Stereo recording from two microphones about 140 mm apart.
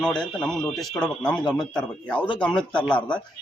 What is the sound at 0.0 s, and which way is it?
A man's voice, 5° left (ahead or behind).